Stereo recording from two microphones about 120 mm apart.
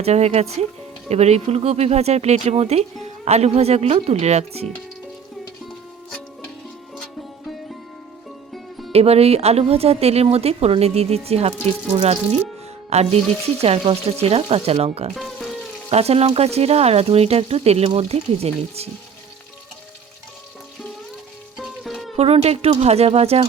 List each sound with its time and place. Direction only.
0.0 s speech: 60° right (ahead or behind)
8.9 s speech: 60° right (ahead or behind)
12.9 s speech: 60° right (ahead or behind)
15.1 s music: centre (ahead or behind)
15.9 s speech: 60° right (ahead or behind)
21.6 s music: centre (ahead or behind)
22.1 s speech: 60° right (ahead or behind)